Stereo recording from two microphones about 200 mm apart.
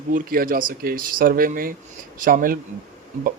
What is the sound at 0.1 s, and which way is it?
Speech, 45° right (ahead or behind).